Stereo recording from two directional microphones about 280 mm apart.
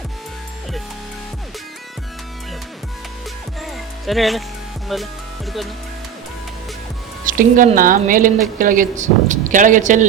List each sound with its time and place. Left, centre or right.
3.6 s music: centre
7.3 s speech: right